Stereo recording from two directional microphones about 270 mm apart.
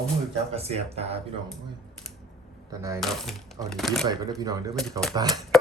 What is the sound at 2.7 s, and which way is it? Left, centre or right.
Speech, centre.